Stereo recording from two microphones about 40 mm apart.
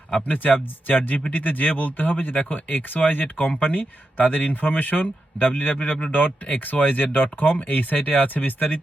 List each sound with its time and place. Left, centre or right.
0.3 s speech: left
2.3 s speech: left